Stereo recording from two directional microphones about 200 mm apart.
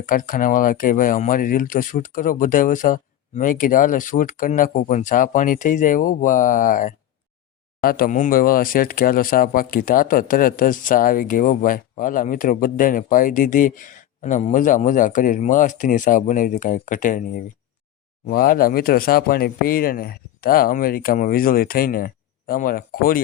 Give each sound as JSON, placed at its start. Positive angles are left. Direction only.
{"t": 0.0, "sound": "speech", "side_deg": 40}